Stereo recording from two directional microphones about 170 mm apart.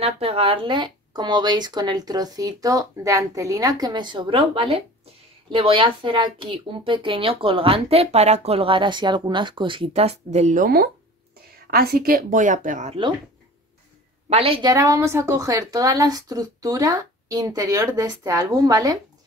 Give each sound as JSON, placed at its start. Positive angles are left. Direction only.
{"t": 0.0, "sound": "a woman's voice", "side_deg": -35}
{"t": 14.3, "sound": "speech", "side_deg": -35}